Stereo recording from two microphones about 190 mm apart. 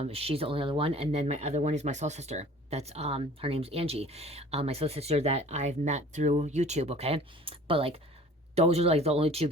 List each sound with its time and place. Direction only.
0.0 s speech: 30° right (ahead or behind)